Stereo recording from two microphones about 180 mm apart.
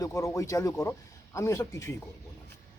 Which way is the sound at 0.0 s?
15° left (ahead or behind).